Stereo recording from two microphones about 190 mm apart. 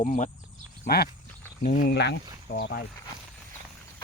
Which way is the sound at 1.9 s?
65° left (ahead or behind).